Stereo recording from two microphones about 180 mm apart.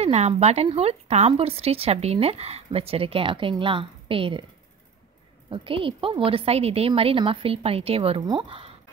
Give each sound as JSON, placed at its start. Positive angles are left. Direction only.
{"t": 0.0, "sound": "speech", "side_deg": -35}
{"t": 5.5, "sound": "speech", "side_deg": -30}